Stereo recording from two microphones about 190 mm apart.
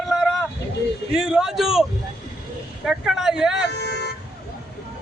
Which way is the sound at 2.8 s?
Centre (ahead or behind).